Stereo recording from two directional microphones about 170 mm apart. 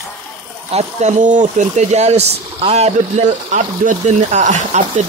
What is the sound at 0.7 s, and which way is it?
Speech, 40° right (ahead or behind).